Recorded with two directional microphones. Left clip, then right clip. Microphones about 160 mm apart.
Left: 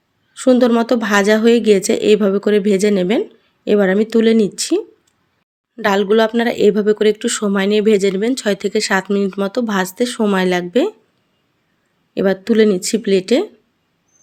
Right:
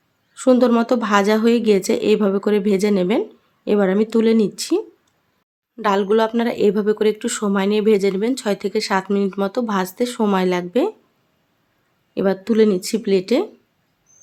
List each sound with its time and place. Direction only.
0.3 s speech: 15° left (ahead or behind)
12.1 s speech: 15° left (ahead or behind)